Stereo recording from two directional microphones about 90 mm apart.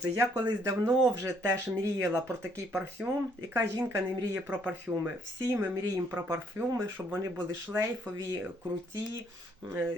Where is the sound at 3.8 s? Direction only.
30° right (ahead or behind).